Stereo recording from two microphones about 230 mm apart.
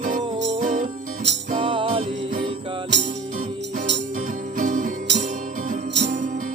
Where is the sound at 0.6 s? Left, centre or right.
Right.